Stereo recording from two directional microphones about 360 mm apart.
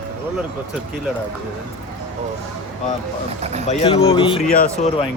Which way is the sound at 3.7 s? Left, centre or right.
Centre.